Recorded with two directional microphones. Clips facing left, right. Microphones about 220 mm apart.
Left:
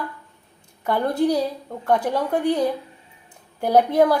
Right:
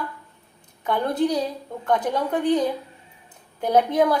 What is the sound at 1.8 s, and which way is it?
Speech, 5° left (ahead or behind).